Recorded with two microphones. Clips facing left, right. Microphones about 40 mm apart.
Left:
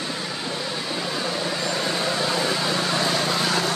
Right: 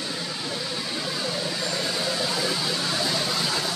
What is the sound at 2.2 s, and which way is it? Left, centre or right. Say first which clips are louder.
Vehicle: left 3 dB; left.